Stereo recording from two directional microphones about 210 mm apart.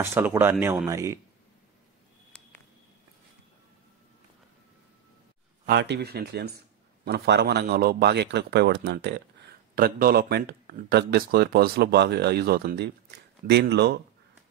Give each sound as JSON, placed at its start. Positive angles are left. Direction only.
{"t": 0.0, "sound": "speech", "side_deg": -10}
{"t": 2.3, "sound": "a sound", "side_deg": 5}
{"t": 5.7, "sound": "a man's voice", "side_deg": -55}